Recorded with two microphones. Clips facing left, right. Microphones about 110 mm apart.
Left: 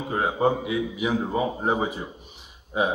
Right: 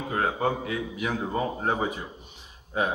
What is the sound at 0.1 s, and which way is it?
Speech, 15° left (ahead or behind).